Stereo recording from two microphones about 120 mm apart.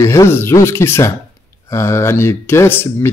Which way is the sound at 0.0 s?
20° left (ahead or behind).